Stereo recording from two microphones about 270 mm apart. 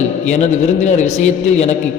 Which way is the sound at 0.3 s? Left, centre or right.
Left.